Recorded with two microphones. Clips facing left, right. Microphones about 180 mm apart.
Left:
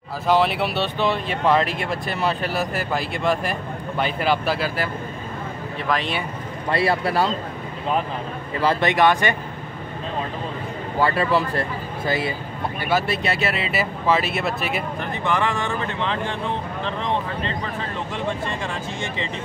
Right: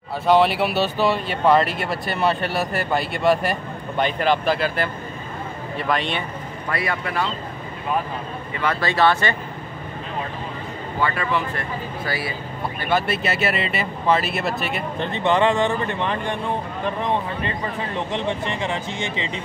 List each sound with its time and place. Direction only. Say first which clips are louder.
0.3 s speech: right 2 dB; centre (ahead or behind)
5.9 s speech: even; centre (ahead or behind)
6.7 s speech: left 5 dB; 30° left (ahead or behind)
8.8 s speech: even; 15° left (ahead or behind)
11.0 s speech: left 3 dB; 35° left (ahead or behind)
12.8 s speech: even; centre (ahead or behind)
15.2 s speech: right 5 dB; 20° right (ahead or behind)
18.1 s speech: even; 20° right (ahead or behind)